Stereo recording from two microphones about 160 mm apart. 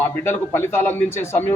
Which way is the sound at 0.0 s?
15° left (ahead or behind).